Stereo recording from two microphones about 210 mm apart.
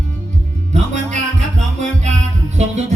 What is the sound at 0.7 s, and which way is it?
Music, 35° right (ahead or behind).